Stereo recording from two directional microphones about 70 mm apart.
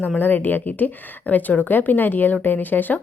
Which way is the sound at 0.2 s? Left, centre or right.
Left.